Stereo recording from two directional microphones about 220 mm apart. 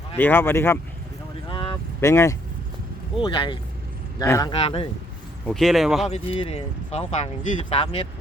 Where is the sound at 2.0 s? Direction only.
10° left (ahead or behind).